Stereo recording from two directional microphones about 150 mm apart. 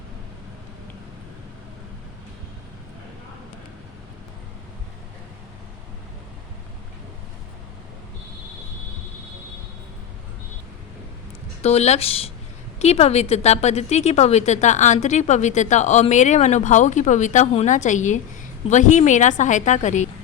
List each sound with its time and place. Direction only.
11.6 s speech: 45° left (ahead or behind)